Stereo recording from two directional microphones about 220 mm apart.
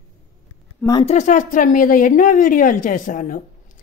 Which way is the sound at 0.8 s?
15° left (ahead or behind).